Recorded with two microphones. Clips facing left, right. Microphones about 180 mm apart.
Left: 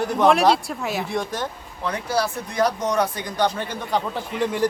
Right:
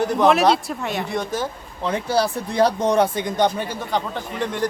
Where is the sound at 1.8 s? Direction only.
30° right (ahead or behind).